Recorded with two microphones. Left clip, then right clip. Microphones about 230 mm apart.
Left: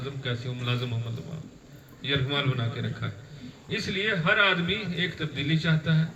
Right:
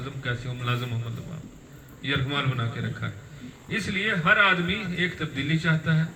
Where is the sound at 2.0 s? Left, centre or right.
Left.